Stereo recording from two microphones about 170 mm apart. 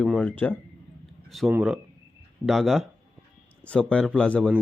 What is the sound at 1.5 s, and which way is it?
A man's voice, 10° right (ahead or behind).